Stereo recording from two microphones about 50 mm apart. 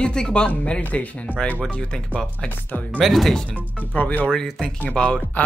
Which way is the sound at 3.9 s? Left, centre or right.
Left.